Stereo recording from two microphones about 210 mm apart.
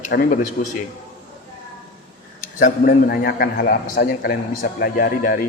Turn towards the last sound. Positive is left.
turn(degrees=45)  # may be behind; listen again after turning